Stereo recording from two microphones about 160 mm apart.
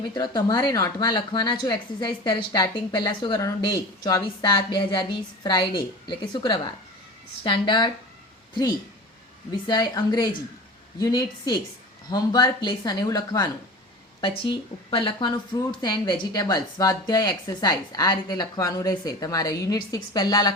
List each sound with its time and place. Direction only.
0.0 s speech: 25° left (ahead or behind)
9.5 s speech: 25° left (ahead or behind)